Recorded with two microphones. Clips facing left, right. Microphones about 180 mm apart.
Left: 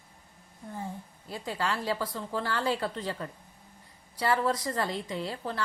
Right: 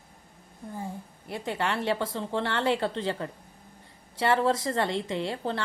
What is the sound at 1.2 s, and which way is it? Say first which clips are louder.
A woman's voice: right 2 dB; 25° right (ahead or behind).